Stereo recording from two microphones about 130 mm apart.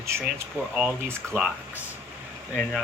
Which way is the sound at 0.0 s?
20° right (ahead or behind).